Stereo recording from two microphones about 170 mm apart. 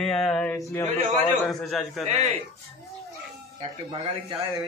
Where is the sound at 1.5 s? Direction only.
Centre (ahead or behind).